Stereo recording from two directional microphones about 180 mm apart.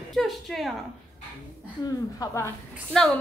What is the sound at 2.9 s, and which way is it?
Speech, centre (ahead or behind).